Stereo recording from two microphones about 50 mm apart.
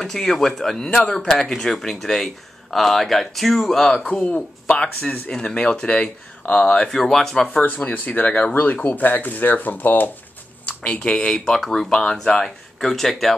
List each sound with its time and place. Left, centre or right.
0.0 s speech: centre
4.0 s speech: left
6.9 s speech: centre
7.5 s speech: left
10.9 s speech: centre